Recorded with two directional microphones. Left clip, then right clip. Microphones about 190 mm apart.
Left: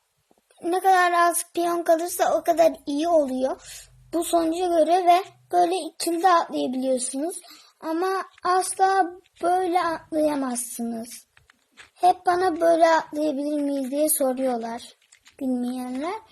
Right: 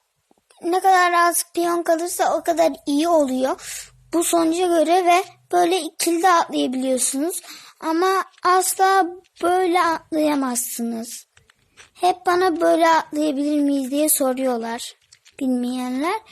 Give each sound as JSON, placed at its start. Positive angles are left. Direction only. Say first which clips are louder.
{"t": 0.6, "sound": "child singing", "louder": "right 3 dB", "side_deg": -25}
{"t": 4.1, "sound": "a woman's voice", "louder": "right 4 dB", "side_deg": -35}